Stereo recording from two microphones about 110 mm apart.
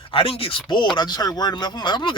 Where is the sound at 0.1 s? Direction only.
55° left (ahead or behind).